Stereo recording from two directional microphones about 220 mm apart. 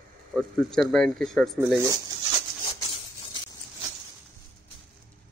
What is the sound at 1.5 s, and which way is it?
Speech, 10° right (ahead or behind).